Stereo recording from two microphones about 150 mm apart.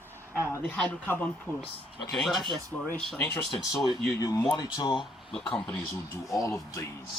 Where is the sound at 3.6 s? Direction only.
25° left (ahead or behind).